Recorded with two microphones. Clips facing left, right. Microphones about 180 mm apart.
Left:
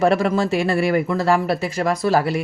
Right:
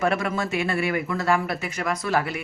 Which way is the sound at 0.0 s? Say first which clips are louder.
Left 7 dB; 35° left (ahead or behind).